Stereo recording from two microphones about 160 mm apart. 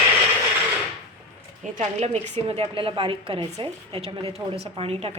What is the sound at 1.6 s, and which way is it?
A woman's voice, 45° right (ahead or behind).